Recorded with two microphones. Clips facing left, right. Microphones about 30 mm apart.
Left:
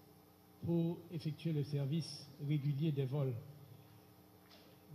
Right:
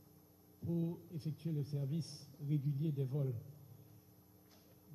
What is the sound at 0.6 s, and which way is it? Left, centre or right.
A man's voice, left.